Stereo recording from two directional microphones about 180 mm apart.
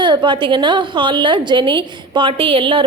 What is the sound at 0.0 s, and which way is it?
A woman's voice, 25° right (ahead or behind).